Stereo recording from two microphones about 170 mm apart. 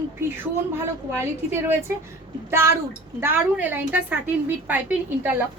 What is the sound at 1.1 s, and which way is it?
Child singing, 15° right (ahead or behind).